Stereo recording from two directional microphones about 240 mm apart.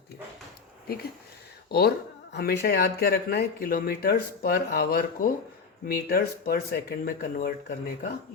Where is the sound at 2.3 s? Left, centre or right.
Left.